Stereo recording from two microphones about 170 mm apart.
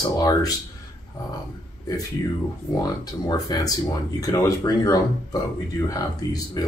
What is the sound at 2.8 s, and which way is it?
Speech, 20° left (ahead or behind).